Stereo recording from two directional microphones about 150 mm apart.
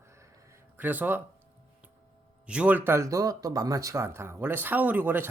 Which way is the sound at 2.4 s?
10° right (ahead or behind).